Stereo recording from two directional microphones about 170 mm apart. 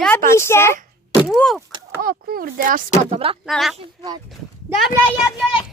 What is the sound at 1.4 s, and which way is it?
Speech, centre (ahead or behind).